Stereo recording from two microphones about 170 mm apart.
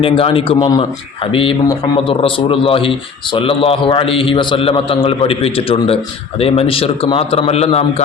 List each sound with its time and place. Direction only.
0.0 s a man's voice: 35° left (ahead or behind)